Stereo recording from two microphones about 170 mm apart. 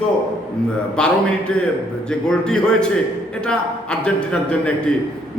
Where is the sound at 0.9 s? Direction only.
5° left (ahead or behind).